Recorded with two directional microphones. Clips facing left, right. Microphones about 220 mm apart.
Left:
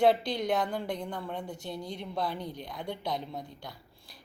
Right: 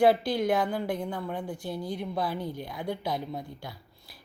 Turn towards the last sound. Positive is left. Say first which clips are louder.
# right 4 dB
turn(degrees=-5)  # may be behind; listen again after turning